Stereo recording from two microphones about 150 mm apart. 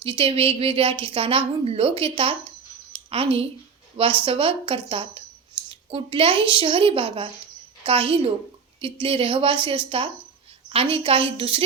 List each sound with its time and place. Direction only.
0.0 s a woman's voice: 35° right (ahead or behind)